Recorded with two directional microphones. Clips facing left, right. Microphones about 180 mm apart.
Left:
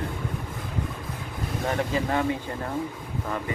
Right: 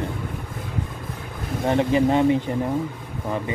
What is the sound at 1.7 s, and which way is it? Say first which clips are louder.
Speech: right 8 dB; 20° right (ahead or behind).